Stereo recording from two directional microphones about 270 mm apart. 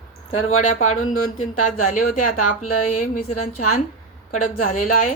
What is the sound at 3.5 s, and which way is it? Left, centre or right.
Speech, left.